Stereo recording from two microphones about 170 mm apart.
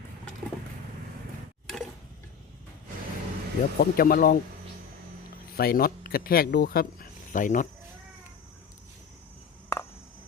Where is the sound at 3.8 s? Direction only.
60° left (ahead or behind).